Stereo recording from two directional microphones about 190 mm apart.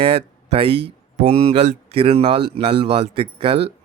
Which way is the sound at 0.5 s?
30° right (ahead or behind).